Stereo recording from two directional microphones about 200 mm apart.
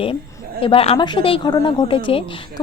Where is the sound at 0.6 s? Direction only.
30° left (ahead or behind).